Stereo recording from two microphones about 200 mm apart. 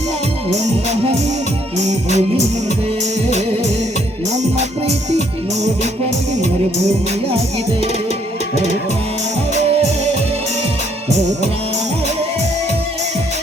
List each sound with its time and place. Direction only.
1.8 s music: 35° right (ahead or behind)
3.2 s music: 35° right (ahead or behind)